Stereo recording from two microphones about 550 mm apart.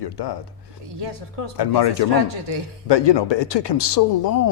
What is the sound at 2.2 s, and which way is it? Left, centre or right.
Speech, right.